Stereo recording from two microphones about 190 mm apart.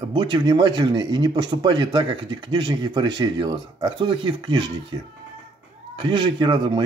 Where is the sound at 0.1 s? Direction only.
25° right (ahead or behind).